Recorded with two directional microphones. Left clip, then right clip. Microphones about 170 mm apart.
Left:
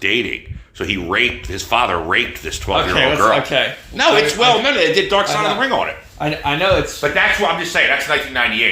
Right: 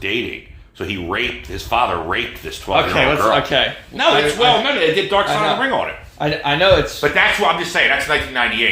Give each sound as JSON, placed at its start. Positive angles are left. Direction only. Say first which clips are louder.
{"t": 0.8, "sound": "speech", "louder": "left 4 dB", "side_deg": 30}
{"t": 2.7, "sound": "speech", "louder": "even", "side_deg": -10}
{"t": 3.3, "sound": "speech", "louder": "right 1 dB", "side_deg": 0}
{"t": 3.9, "sound": "a man's voice", "louder": "left 1 dB", "side_deg": 50}
{"t": 6.1, "sound": "speech", "louder": "right 2 dB", "side_deg": -5}